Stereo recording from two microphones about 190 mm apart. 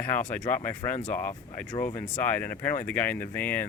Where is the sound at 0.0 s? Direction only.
10° left (ahead or behind).